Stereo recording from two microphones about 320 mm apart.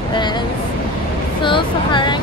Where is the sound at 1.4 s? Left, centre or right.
Centre.